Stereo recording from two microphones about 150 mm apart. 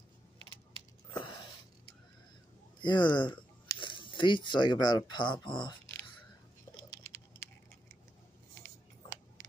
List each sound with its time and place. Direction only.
1.1 s a sound: 30° left (ahead or behind)
2.8 s speech: 30° left (ahead or behind)
6.9 s patter: 20° left (ahead or behind)